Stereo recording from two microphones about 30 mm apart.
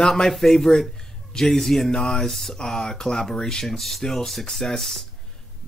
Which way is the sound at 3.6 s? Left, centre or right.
Centre.